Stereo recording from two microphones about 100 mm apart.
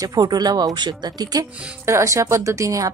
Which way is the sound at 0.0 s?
40° right (ahead or behind).